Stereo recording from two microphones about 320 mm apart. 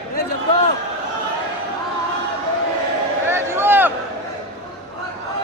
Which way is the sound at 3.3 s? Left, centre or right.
Centre.